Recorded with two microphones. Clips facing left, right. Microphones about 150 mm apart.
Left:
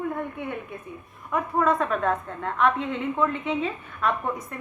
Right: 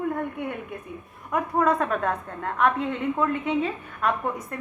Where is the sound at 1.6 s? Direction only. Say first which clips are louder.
Even; 40° right (ahead or behind).